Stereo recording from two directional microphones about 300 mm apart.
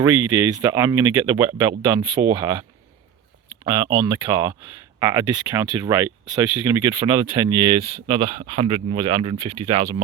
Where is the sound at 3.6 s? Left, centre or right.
Centre.